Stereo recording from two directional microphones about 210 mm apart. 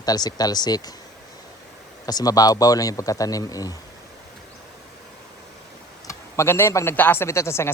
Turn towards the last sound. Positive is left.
turn(degrees=10)  # may be behind; listen again after turning